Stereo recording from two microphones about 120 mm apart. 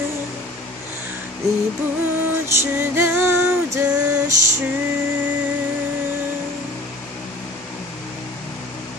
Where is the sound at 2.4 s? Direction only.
20° right (ahead or behind).